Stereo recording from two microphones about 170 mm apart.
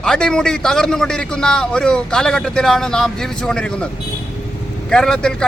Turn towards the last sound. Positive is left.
turn(degrees=5)  # may be behind; listen again after turning